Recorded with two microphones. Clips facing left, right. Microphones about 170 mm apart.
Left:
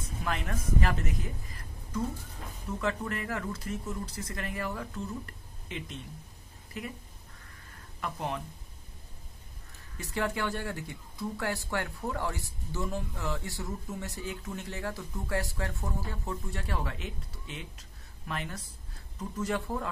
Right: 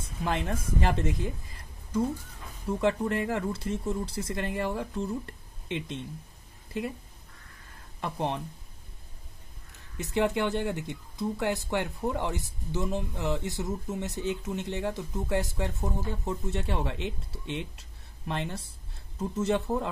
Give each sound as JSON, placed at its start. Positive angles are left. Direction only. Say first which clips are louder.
{"t": 0.2, "sound": "a woman's voice", "louder": "right 4 dB", "side_deg": -25}
{"t": 8.0, "sound": "speech", "louder": "right 4 dB", "side_deg": -25}
{"t": 9.9, "sound": "speech", "louder": "right 6 dB", "side_deg": -20}